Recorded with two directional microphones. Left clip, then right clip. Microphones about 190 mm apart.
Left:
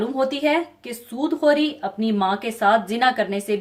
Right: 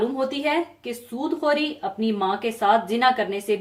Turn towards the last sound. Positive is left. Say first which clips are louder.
# left 1 dB
turn(degrees=50)  # may be behind; listen again after turning